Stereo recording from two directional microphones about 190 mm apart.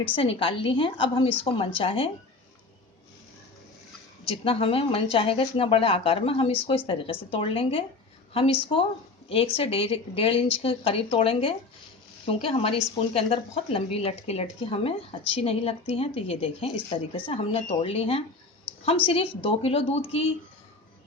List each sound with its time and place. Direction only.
0.1 s speech: 30° left (ahead or behind)
4.3 s speech: 30° left (ahead or behind)